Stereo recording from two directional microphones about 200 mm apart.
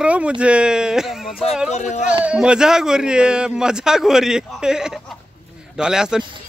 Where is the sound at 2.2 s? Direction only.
5° right (ahead or behind).